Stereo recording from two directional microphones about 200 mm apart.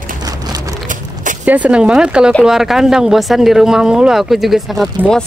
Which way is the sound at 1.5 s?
5° right (ahead or behind).